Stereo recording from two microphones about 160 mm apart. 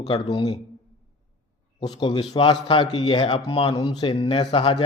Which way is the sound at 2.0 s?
30° left (ahead or behind).